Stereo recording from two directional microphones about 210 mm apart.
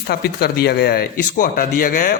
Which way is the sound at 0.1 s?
50° left (ahead or behind).